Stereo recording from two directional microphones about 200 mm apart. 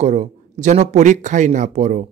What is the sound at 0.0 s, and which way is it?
Speech, 35° right (ahead or behind).